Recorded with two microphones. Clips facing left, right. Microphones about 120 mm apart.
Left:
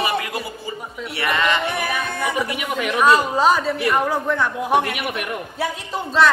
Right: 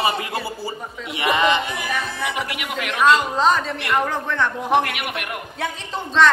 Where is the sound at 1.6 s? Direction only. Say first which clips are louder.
Left 3 dB; 60° left (ahead or behind).